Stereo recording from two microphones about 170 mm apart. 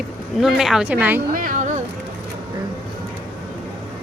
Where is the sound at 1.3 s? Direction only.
50° right (ahead or behind).